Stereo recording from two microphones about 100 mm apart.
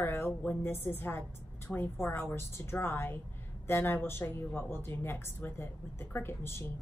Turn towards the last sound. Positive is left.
turn(degrees=25)  # may be behind; listen again after turning